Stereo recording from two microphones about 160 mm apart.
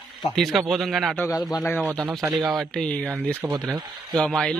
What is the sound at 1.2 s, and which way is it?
Speech, 20° left (ahead or behind).